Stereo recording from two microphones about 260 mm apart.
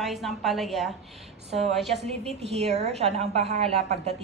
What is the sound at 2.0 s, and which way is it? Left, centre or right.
A woman's voice, right.